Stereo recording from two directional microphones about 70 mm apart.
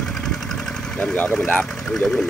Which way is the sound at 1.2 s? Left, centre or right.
Left.